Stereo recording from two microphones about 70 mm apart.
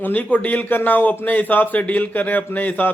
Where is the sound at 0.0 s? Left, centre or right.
Left.